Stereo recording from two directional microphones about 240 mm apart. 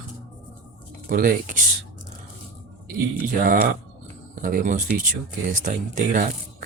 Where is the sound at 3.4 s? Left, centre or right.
Right.